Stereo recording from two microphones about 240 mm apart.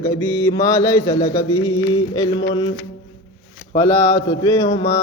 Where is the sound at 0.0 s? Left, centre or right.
Centre.